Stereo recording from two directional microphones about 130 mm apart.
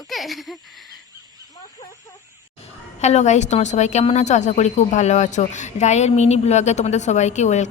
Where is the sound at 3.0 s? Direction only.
60° left (ahead or behind).